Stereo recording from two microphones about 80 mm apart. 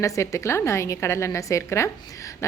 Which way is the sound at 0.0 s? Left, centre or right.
Left.